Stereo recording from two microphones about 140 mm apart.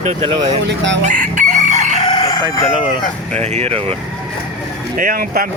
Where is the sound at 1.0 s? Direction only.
65° right (ahead or behind).